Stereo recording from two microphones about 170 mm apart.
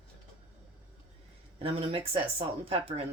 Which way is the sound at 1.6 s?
35° right (ahead or behind).